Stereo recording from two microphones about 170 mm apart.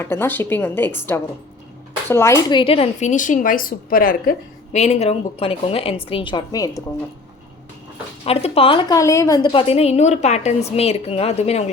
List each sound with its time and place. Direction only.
0.0 s speech: 15° left (ahead or behind)
2.5 s a woman's voice: 30° left (ahead or behind)
8.2 s a woman's voice: 35° left (ahead or behind)
9.0 s a woman's voice: 20° left (ahead or behind); by 11.6 s 40° left (ahead or behind)